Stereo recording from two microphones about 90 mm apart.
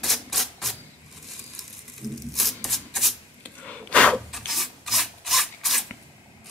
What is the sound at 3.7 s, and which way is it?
Wood, 15° left (ahead or behind).